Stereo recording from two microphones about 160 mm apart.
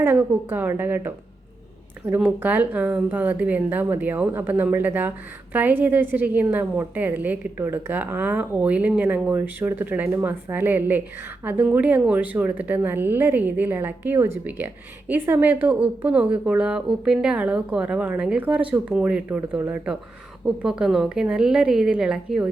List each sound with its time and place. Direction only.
0.0 s a woman's voice: 10° right (ahead or behind)